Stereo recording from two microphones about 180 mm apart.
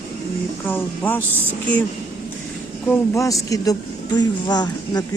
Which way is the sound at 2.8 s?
15° left (ahead or behind).